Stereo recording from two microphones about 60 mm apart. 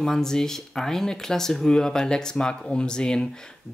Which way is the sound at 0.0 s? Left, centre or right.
Centre.